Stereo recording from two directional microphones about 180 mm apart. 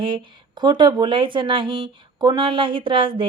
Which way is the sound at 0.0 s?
25° right (ahead or behind).